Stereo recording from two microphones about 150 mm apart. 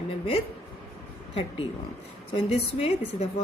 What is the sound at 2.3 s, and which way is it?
Speech, 40° left (ahead or behind).